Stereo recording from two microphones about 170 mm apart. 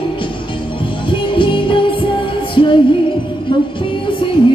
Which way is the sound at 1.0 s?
30° left (ahead or behind).